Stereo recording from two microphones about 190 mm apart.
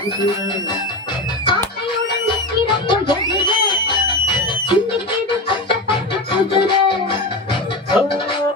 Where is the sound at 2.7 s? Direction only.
25° left (ahead or behind).